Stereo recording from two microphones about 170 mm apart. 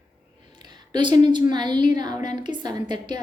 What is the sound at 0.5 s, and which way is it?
A woman's voice, 25° right (ahead or behind).